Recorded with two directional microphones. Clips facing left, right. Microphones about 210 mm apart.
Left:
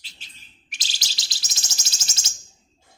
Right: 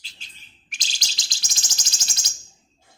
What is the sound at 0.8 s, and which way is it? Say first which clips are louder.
Bird: even; 5° left (ahead or behind).